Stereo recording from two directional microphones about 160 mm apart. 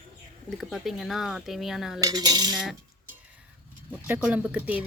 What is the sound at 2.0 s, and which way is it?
Cutlery, 25° right (ahead or behind).